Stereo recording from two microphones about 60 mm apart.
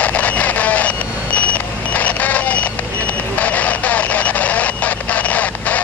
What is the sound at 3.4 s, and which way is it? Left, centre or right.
Radio, left.